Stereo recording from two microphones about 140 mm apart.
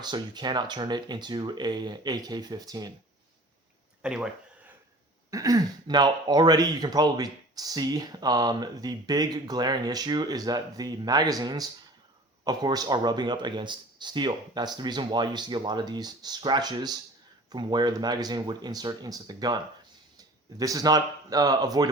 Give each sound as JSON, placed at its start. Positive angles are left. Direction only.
{"t": 0.0, "sound": "speech", "side_deg": -30}
{"t": 4.0, "sound": "speech", "side_deg": -5}
{"t": 5.3, "sound": "speech", "side_deg": -25}